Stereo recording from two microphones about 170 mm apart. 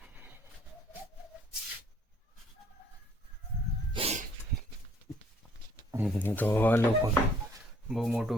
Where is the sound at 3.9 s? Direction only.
35° right (ahead or behind).